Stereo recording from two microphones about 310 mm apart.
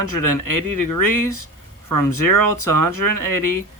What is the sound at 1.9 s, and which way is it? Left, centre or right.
Speech, left.